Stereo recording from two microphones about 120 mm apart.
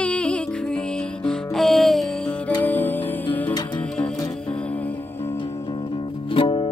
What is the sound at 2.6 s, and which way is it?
Music, 15° left (ahead or behind).